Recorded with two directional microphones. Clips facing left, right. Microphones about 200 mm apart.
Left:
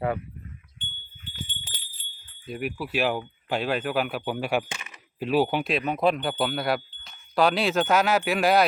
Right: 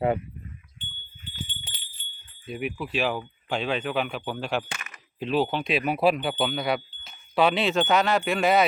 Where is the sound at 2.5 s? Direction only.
Centre (ahead or behind).